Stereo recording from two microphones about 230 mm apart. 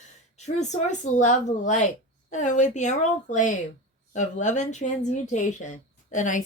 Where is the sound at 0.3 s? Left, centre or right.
Left.